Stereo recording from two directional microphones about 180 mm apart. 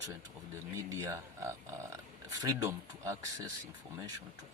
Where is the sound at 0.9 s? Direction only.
15° right (ahead or behind).